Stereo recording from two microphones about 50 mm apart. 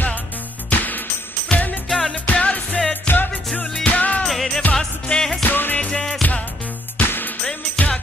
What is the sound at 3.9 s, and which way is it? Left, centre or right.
Music, left.